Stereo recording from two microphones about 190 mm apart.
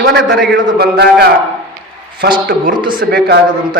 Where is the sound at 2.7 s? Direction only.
25° right (ahead or behind).